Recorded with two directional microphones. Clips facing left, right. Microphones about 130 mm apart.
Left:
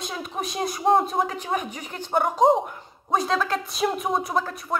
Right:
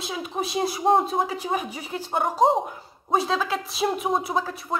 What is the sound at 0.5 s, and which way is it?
Speech, centre (ahead or behind).